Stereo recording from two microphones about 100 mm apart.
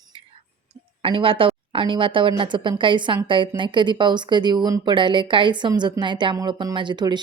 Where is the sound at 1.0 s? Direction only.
65° right (ahead or behind).